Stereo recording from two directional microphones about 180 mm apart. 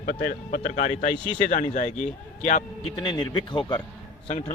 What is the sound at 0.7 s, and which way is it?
Speech, 40° left (ahead or behind).